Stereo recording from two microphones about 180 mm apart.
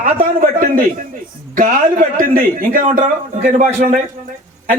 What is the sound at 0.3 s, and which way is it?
A man's voice, 55° right (ahead or behind).